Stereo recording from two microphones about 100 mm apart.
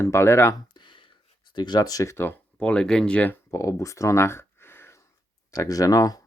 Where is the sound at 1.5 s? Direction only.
45° left (ahead or behind); by 2.3 s 25° left (ahead or behind).